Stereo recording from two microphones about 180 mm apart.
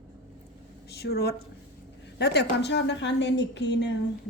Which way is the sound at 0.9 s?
65° left (ahead or behind).